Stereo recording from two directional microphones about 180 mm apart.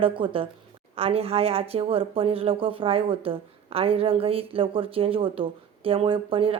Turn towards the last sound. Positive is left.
turn(degrees=-30)  # may be behind; listen again after turning